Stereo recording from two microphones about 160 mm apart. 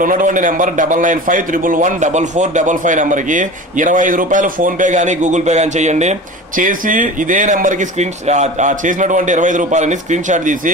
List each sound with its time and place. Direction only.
0.0 s a man's voice: 55° right (ahead or behind)